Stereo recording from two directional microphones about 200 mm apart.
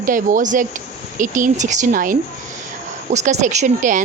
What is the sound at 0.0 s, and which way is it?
Speech, 40° right (ahead or behind).